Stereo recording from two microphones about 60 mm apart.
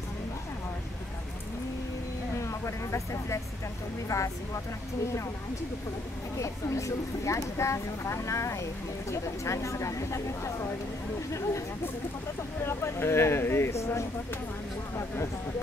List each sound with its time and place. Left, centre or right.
2.4 s speech: left
6.3 s speech: left
12.6 s speech: left